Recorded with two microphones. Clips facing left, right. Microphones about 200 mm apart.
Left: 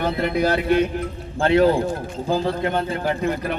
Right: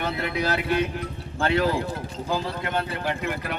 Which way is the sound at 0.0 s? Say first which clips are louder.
Left 6 dB; 30° left (ahead or behind).